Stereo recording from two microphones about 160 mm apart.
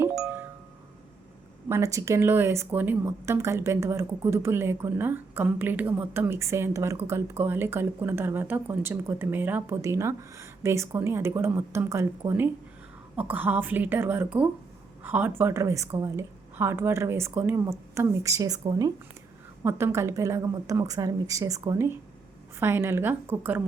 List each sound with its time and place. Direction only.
0.0 s music: 15° right (ahead or behind)
1.7 s a woman's voice: 20° right (ahead or behind)